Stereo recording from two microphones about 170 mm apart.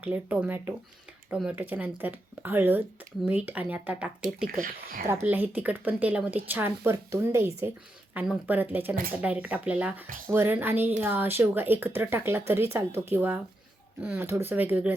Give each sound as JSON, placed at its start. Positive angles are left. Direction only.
{"t": 0.0, "sound": "speech", "side_deg": -10}
{"t": 4.4, "sound": "speech", "side_deg": -55}
{"t": 5.0, "sound": "speech", "side_deg": -15}